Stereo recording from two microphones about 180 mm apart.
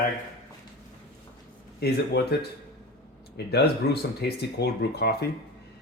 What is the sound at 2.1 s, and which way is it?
Speech, 65° left (ahead or behind).